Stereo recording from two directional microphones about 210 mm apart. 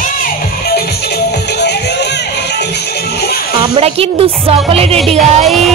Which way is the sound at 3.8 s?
30° right (ahead or behind).